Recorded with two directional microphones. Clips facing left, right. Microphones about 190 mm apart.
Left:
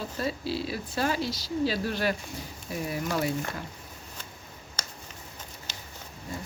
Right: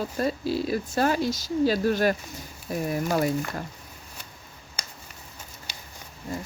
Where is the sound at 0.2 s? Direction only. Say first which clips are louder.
Right 4 dB; 45° right (ahead or behind).